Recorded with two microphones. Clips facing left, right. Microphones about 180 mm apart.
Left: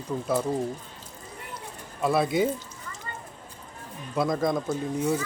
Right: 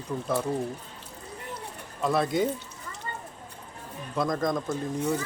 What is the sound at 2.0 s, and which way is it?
Speech, 5° left (ahead or behind).